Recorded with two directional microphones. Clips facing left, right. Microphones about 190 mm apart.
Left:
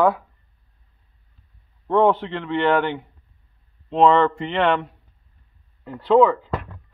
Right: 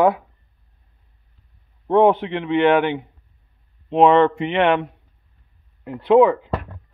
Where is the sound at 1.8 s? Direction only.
15° right (ahead or behind).